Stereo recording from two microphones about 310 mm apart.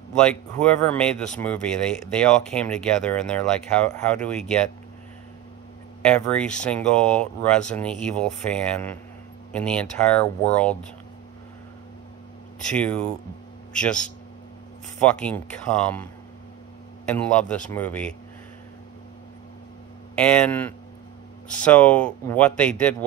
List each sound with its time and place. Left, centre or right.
0.2 s speech: centre
6.0 s speech: centre
12.6 s speech: centre
20.2 s speech: centre